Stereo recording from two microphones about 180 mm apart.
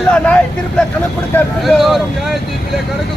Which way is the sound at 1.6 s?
Centre (ahead or behind).